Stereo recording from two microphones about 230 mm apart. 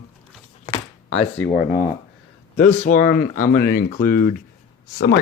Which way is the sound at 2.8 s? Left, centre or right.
Left.